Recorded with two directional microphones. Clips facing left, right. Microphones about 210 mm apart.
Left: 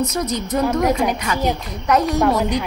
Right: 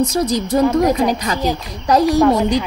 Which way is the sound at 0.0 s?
30° right (ahead or behind).